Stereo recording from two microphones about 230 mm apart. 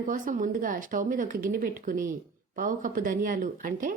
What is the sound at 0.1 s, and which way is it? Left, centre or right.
Speech, right.